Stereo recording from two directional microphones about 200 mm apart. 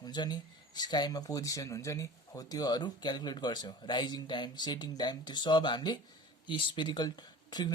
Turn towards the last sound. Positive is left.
turn(degrees=20)  # may be behind; listen again after turning